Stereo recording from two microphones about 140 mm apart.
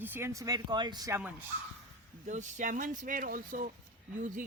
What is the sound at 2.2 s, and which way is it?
Speech, 60° right (ahead or behind).